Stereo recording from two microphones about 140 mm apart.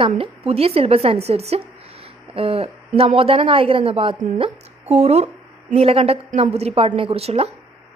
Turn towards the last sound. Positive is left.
turn(degrees=-45)  # may be behind; listen again after turning